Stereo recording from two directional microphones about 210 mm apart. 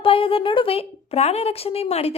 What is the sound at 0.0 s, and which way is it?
Speech, 25° left (ahead or behind).